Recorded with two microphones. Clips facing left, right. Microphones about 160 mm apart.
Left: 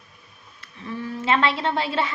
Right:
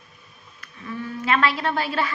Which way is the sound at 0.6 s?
25° left (ahead or behind).